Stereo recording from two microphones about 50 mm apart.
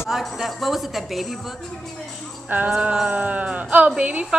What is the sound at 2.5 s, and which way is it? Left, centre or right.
Jingle bell, right.